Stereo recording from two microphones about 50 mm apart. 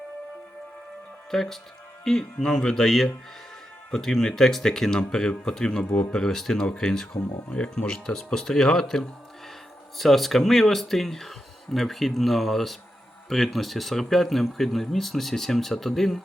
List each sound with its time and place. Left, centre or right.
1.3 s speech: centre
6.1 s speech: centre